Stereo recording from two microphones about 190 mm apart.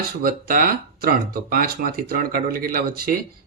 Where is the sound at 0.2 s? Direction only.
50° right (ahead or behind).